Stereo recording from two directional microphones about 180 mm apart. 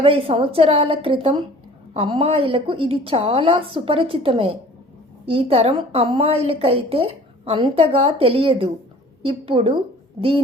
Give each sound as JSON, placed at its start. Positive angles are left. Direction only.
{"t": 0.0, "sound": "a woman's voice", "side_deg": -30}